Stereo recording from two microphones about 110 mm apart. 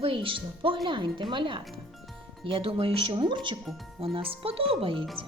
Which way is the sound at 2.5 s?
55° right (ahead or behind).